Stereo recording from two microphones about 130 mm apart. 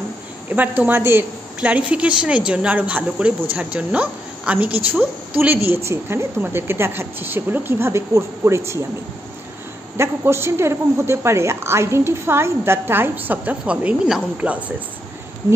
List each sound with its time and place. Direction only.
0.5 s a woman's voice: 15° right (ahead or behind)
9.9 s a woman's voice: 20° right (ahead or behind)